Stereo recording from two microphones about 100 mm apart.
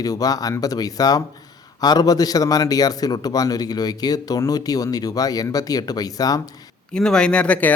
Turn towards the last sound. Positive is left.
turn(degrees=15)  # may be behind; listen again after turning